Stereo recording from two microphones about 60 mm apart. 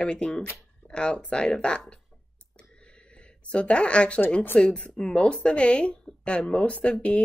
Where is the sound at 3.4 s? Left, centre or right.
Centre.